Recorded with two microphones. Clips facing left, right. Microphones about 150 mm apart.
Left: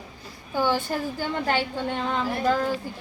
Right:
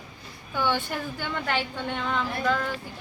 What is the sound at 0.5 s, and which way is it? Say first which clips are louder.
A woman's voice: left 3 dB; 40° left (ahead or behind).